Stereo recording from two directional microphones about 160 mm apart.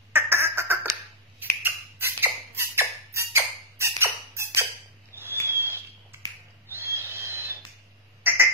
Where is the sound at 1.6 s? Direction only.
15° right (ahead or behind).